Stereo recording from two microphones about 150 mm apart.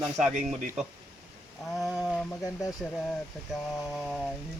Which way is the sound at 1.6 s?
Centre (ahead or behind).